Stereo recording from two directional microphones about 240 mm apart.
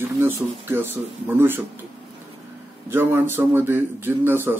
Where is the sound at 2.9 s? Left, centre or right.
Centre.